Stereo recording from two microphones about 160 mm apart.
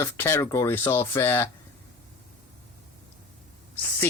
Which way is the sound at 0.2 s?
15° left (ahead or behind).